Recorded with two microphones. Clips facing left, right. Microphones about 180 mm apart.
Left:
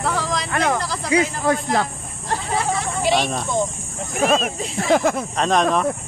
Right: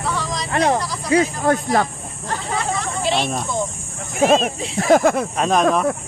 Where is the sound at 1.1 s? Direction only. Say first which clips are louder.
Right 2 dB; 50° right (ahead or behind).